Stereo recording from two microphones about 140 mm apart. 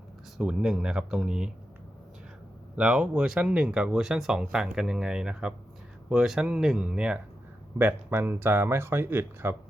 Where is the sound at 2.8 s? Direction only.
5° right (ahead or behind).